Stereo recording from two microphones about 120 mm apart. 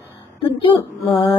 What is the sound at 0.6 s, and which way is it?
Female singing, 45° left (ahead or behind).